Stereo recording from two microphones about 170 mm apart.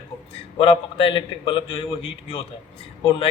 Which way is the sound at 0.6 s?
30° left (ahead or behind).